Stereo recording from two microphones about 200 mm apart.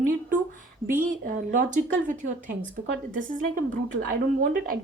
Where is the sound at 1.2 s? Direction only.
45° right (ahead or behind).